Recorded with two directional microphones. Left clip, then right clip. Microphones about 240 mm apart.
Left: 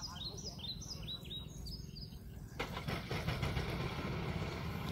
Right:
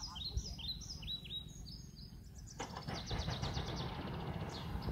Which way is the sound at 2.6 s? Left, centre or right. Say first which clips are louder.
Left 3 dB; left.